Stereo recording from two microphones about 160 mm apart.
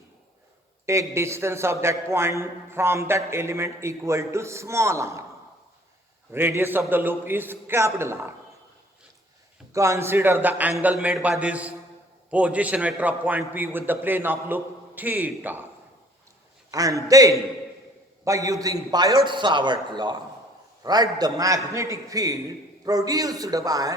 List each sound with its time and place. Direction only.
0.9 s a man's voice: 15° right (ahead or behind)
6.3 s a man's voice: 15° right (ahead or behind)
9.7 s a man's voice: 20° right (ahead or behind)
16.7 s a man's voice: 20° right (ahead or behind)